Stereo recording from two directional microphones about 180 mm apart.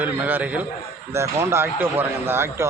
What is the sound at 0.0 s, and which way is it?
Speech, 10° right (ahead or behind).